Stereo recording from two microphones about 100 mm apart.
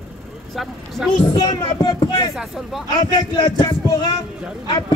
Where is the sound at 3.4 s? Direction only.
45° left (ahead or behind).